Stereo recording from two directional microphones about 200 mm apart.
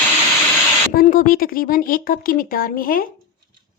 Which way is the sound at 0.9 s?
45° left (ahead or behind).